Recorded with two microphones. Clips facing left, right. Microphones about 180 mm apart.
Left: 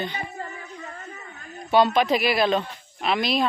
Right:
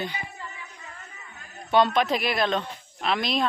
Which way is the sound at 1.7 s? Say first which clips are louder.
Left 2 dB; 5° left (ahead or behind).